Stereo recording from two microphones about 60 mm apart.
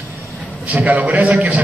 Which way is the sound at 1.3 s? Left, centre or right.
Right.